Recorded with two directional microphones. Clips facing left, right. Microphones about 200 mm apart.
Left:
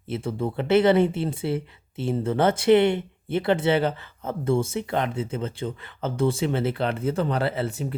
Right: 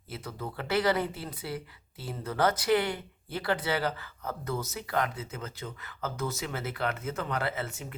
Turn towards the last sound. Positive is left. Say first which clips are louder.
# left 8 dB
turn(degrees=35)  # may be behind; listen again after turning